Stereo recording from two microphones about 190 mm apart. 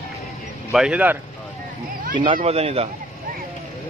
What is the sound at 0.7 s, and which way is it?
Speech, 5° right (ahead or behind).